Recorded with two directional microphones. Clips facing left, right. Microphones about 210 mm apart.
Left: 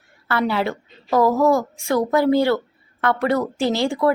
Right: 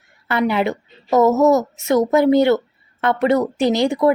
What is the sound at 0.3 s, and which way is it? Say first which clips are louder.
Speech: right 3 dB; 20° right (ahead or behind).